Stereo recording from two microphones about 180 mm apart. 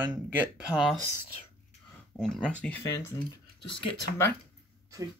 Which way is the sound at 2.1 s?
5° left (ahead or behind).